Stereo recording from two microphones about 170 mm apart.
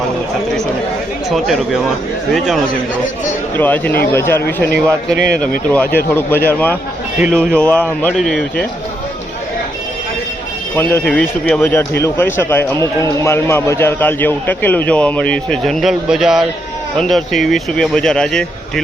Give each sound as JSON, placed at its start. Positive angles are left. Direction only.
{"t": 1.3, "sound": "speech", "side_deg": 0}
{"t": 3.6, "sound": "speech", "side_deg": 10}
{"t": 5.7, "sound": "speech", "side_deg": 10}
{"t": 7.2, "sound": "speech", "side_deg": -10}
{"t": 7.5, "sound": "speech", "side_deg": 10}
{"t": 10.8, "sound": "speech", "side_deg": 10}